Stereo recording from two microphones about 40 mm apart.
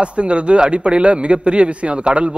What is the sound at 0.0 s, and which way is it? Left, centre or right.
A man's voice, right.